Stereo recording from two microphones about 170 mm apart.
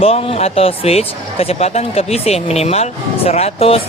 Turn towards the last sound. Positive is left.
turn(degrees=35)  # may be behind; listen again after turning